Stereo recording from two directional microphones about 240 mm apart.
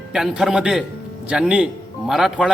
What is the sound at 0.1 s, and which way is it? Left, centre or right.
A man's voice, centre.